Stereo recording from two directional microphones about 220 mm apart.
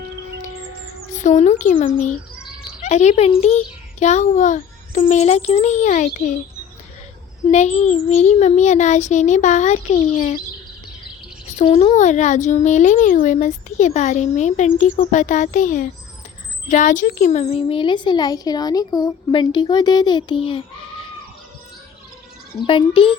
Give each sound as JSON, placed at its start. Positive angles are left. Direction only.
{"t": 1.1, "sound": "speech", "side_deg": 35}
{"t": 7.4, "sound": "speech", "side_deg": 30}
{"t": 11.5, "sound": "a woman's voice", "side_deg": 25}
{"t": 22.6, "sound": "a woman's voice", "side_deg": 25}